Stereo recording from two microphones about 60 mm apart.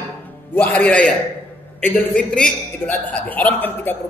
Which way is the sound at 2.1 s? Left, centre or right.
Centre.